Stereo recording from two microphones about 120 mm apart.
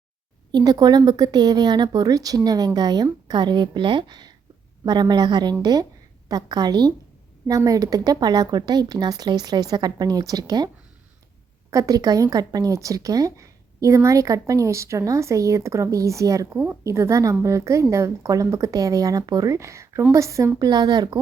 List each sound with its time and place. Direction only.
0.5 s speech: 35° right (ahead or behind)
11.7 s speech: 30° right (ahead or behind)